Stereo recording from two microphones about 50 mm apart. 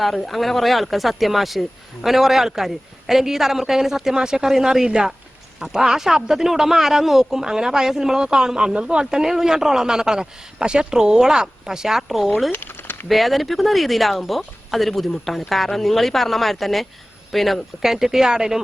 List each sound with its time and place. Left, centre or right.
0.0 s speech: centre
12.5 s a sound: left
13.1 s speech: centre